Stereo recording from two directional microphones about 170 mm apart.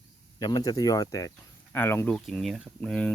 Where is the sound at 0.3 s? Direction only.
20° left (ahead or behind).